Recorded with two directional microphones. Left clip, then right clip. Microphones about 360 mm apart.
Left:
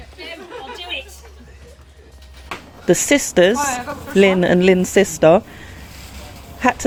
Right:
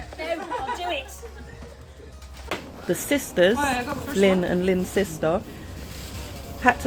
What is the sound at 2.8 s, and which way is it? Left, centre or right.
Speech, left.